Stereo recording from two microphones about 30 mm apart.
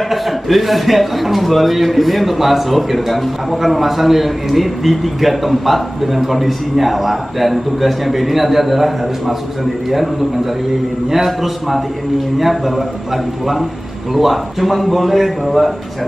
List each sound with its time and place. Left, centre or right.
0.1 s a man's voice: centre